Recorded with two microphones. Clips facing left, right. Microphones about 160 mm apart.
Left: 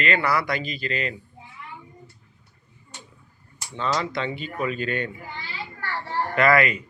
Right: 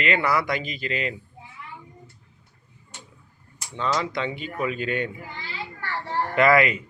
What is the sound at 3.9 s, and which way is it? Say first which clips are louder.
Speech: even; 15° right (ahead or behind).